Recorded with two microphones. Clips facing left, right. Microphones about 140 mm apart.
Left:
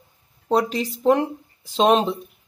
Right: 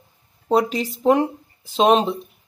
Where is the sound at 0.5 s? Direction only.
Centre (ahead or behind).